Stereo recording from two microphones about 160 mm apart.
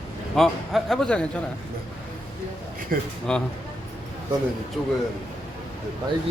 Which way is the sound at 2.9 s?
60° right (ahead or behind).